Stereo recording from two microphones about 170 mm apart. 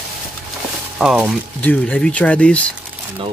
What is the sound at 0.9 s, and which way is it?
Speech, 5° right (ahead or behind).